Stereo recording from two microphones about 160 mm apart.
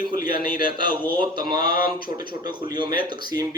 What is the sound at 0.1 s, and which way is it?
Speech, 65° left (ahead or behind).